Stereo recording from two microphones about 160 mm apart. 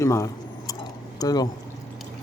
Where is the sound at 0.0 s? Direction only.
20° left (ahead or behind).